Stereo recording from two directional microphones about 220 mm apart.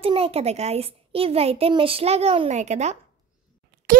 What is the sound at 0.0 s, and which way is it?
A child's voice, 25° right (ahead or behind).